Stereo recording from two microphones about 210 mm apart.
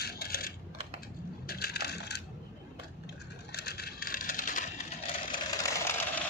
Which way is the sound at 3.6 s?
50° left (ahead or behind).